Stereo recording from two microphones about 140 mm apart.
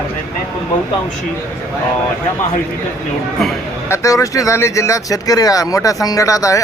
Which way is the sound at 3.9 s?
25° left (ahead or behind).